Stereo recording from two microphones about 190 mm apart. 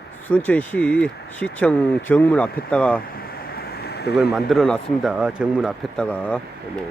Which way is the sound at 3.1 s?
55° left (ahead or behind).